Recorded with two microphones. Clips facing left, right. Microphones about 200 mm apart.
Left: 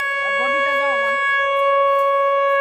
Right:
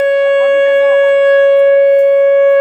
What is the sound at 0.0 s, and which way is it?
Shofar, 30° right (ahead or behind).